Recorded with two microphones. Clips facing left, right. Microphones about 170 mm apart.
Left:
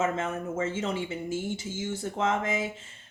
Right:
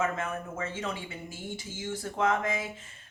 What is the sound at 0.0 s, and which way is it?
A woman's voice, 25° left (ahead or behind).